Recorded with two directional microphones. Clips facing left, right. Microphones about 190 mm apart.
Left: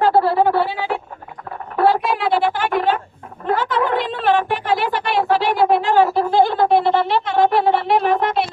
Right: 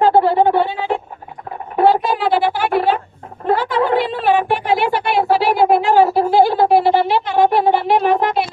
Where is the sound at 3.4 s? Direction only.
35° right (ahead or behind).